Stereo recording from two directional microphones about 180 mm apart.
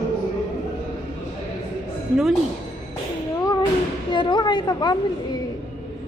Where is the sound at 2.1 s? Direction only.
Centre (ahead or behind).